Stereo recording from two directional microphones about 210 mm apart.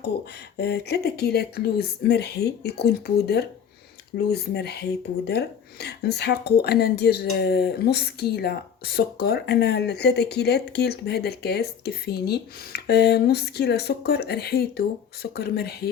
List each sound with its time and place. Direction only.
0.5 s speech: 50° left (ahead or behind)